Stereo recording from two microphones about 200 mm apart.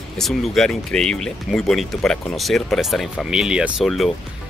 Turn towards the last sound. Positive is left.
turn(degrees=0)  # may be behind; listen again after turning